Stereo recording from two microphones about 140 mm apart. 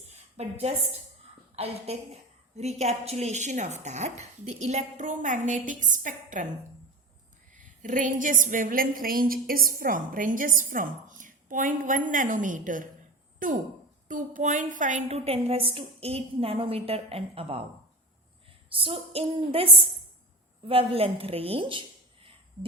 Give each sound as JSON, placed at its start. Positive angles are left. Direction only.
{"t": 1.5, "sound": "a woman's voice", "side_deg": -45}
{"t": 7.6, "sound": "a woman's voice", "side_deg": -65}
{"t": 18.7, "sound": "a sound", "side_deg": -40}
{"t": 20.7, "sound": "a woman's voice", "side_deg": -45}